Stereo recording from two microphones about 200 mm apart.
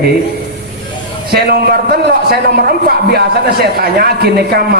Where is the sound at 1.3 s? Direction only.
50° right (ahead or behind).